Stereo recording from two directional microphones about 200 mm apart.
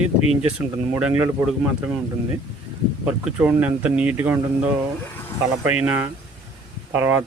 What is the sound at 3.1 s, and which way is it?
Speech, 5° right (ahead or behind).